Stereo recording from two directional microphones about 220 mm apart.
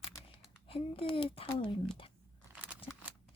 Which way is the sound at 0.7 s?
25° left (ahead or behind).